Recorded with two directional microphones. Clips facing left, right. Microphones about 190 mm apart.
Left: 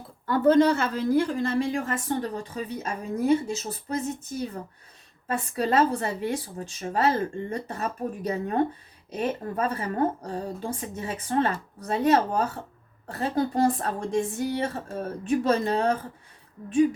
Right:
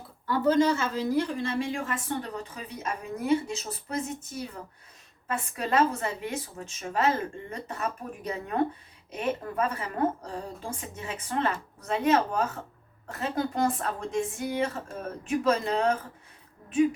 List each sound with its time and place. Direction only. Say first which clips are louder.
0.3 s a woman's voice: left 4 dB; 55° left (ahead or behind); by 4.3 s 35° left (ahead or behind)
5.3 s a woman's voice: left 3 dB; 35° left (ahead or behind)